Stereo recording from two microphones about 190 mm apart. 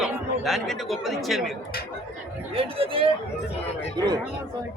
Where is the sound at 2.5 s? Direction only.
30° right (ahead or behind).